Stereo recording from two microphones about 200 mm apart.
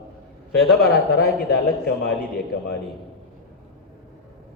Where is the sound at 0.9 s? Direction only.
50° left (ahead or behind).